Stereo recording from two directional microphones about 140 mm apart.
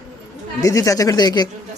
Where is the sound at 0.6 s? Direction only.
25° left (ahead or behind).